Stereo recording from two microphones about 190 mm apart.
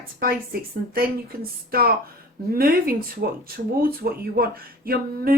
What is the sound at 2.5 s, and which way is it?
Speech, 50° right (ahead or behind).